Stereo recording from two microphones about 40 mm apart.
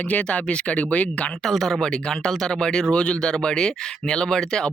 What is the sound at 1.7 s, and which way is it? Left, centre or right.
Speech, centre.